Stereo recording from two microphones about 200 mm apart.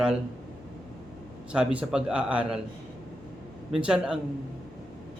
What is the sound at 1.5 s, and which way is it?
Speech, 5° right (ahead or behind).